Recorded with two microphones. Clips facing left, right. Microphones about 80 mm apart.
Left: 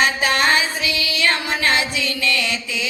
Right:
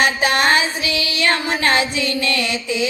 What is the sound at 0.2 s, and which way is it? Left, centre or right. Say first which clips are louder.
Female singing: right 2 dB; right.